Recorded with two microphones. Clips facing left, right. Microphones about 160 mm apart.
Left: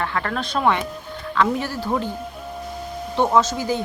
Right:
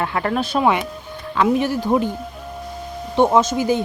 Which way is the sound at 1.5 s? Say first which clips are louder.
Right 6 dB; 15° right (ahead or behind).